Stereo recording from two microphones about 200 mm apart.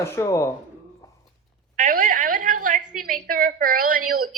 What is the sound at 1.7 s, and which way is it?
A woman's voice, 40° right (ahead or behind).